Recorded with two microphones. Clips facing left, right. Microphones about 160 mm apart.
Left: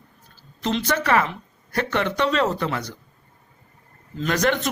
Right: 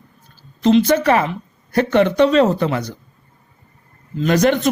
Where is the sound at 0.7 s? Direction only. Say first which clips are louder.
Right 7 dB; 20° right (ahead or behind).